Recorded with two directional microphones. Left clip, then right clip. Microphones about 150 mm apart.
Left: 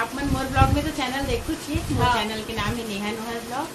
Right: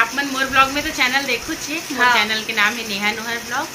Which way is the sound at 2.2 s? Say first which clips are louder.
Right 10 dB; 20° left (ahead or behind).